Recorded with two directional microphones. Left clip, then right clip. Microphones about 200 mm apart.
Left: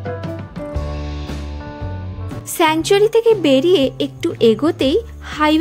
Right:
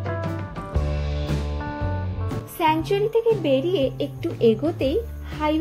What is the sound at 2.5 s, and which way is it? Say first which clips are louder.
Speech: left 7 dB; 40° left (ahead or behind).